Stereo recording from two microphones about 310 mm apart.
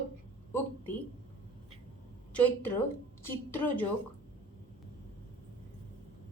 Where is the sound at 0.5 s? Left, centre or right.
Centre.